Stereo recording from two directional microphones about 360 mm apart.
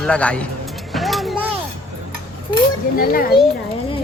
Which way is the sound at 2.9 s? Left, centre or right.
Left.